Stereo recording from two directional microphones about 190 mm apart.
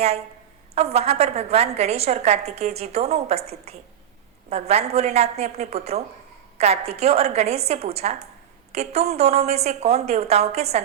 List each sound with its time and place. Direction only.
0.8 s a woman's voice: 35° right (ahead or behind)